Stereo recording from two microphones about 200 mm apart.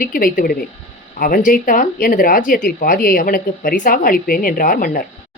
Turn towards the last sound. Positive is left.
turn(degrees=45)  # may be behind; listen again after turning